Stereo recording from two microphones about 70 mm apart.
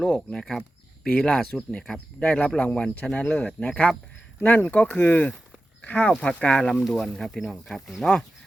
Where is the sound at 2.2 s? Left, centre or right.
Centre.